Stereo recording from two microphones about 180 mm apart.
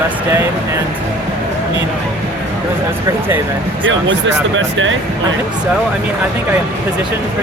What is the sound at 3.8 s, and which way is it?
Speech, 90° right.